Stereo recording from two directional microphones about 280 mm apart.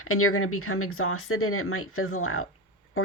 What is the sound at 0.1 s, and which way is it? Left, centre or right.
Speech, left.